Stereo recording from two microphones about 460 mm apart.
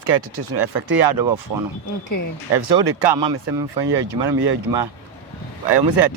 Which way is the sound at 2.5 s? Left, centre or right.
Right.